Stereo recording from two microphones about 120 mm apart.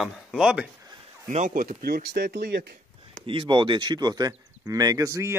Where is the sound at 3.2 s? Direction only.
45° right (ahead or behind).